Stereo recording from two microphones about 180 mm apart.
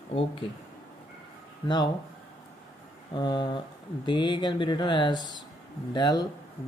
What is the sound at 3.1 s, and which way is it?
Speech, 25° left (ahead or behind).